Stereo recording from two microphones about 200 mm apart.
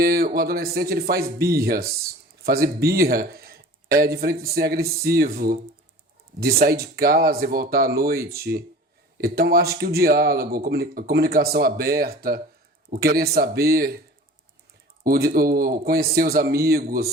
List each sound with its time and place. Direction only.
0.0 s a sound: 50° right (ahead or behind)
0.3 s speech: 50° right (ahead or behind)
15.0 s speech: 50° right (ahead or behind)